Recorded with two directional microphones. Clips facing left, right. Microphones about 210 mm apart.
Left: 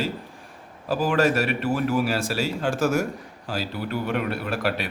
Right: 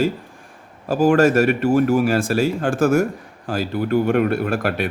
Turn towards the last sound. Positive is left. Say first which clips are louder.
# right 5 dB
turn(degrees=-50)  # may be behind; listen again after turning